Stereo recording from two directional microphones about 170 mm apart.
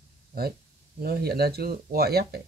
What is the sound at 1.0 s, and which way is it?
Speech, 65° right (ahead or behind).